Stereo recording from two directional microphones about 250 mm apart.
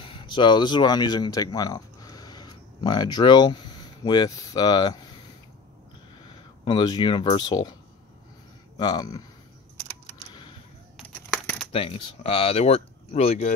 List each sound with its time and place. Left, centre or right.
0.0 s speech: left
6.6 s speech: centre
8.7 s speech: centre
11.3 s a sound: centre
11.7 s speech: left